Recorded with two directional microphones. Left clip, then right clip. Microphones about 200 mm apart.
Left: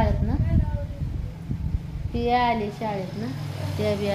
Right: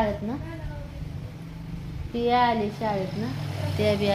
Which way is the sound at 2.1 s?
15° right (ahead or behind).